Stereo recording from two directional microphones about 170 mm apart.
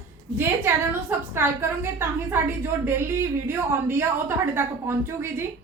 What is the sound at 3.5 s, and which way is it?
A woman's voice, 15° right (ahead or behind).